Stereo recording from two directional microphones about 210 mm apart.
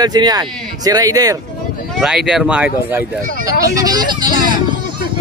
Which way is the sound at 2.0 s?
5° right (ahead or behind).